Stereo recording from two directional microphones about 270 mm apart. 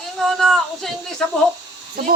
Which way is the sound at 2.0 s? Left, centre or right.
Right.